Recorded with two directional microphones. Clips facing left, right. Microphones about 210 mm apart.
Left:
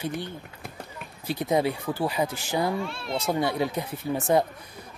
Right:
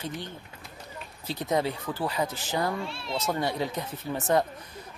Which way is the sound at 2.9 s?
55° left (ahead or behind).